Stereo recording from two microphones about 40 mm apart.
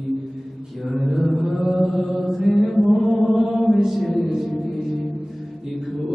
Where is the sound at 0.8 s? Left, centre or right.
Centre.